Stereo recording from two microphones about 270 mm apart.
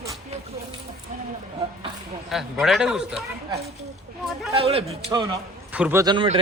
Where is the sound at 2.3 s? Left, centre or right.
Centre.